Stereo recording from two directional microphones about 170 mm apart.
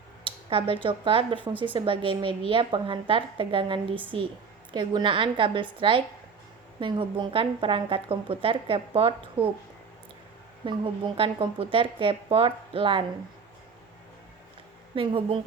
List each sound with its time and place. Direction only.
0.3 s a woman's voice: 30° right (ahead or behind)
9.4 s speech: 10° right (ahead or behind)
10.7 s a woman's voice: 30° right (ahead or behind)
14.9 s a woman's voice: 30° right (ahead or behind)